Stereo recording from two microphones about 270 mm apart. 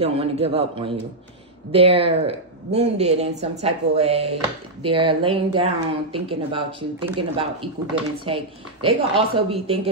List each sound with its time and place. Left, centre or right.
0.0 s speech: right